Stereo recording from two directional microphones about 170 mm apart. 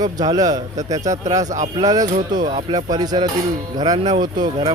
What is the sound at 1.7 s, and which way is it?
Speech, 20° right (ahead or behind).